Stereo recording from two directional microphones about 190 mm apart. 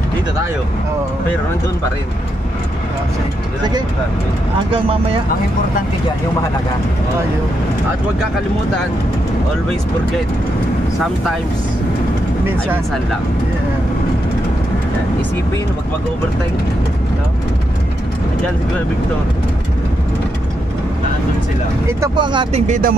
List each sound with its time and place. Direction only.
21.8 s speech: 20° right (ahead or behind)
22.7 s speech: 45° right (ahead or behind)